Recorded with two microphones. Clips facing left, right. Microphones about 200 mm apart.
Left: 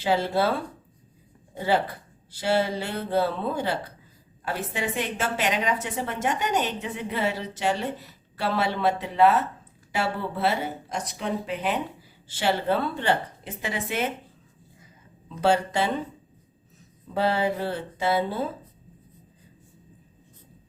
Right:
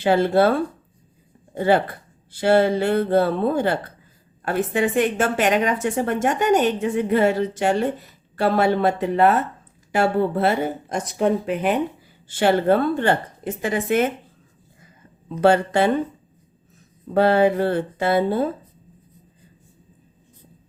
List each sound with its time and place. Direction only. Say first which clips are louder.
0.0 s speech: right 7 dB; 55° right (ahead or behind)
1.5 s a woman's voice: right 6 dB; 55° right (ahead or behind)
15.3 s speech: right 6 dB; 55° right (ahead or behind)
17.2 s speech: right 8 dB; 55° right (ahead or behind)